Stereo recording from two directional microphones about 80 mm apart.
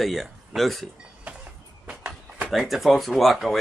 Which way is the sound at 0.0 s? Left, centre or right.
Centre.